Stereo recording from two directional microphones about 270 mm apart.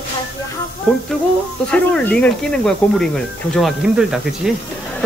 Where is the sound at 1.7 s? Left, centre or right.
Centre.